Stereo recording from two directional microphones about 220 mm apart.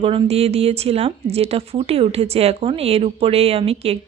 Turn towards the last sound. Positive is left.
turn(degrees=-25)  # may be behind; listen again after turning